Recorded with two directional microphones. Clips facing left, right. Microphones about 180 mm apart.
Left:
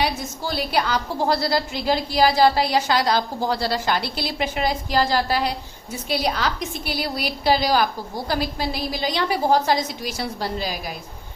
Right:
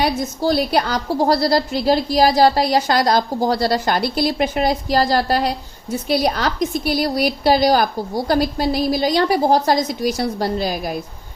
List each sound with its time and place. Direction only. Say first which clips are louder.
0.0 s a woman's voice: right 6 dB; 40° right (ahead or behind)